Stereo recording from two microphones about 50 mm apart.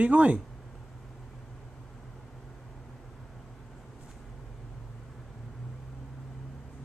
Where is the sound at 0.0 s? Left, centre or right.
Right.